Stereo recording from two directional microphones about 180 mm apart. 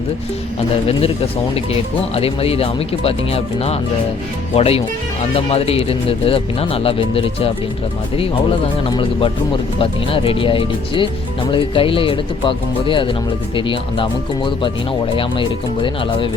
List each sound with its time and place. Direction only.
2.1 s speech: 35° left (ahead or behind)